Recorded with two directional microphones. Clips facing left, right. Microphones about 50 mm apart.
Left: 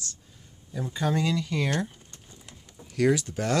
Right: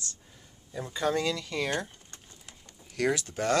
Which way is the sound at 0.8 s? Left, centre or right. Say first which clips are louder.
Left 1 dB; centre.